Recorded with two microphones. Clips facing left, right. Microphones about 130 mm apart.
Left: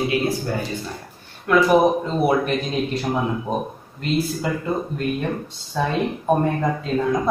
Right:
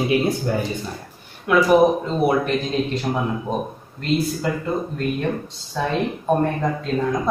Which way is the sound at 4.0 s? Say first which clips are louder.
Right 1 dB; centre (ahead or behind).